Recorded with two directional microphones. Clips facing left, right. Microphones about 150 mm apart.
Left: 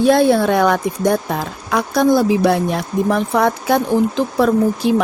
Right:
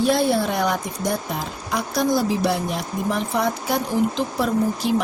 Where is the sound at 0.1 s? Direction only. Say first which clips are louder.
Left 7 dB; 55° left (ahead or behind).